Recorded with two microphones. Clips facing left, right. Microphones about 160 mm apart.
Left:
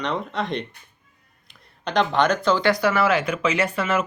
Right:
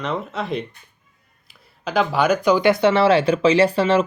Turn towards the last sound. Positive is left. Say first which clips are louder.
# right 7 dB
turn(degrees=-30)  # may be behind; listen again after turning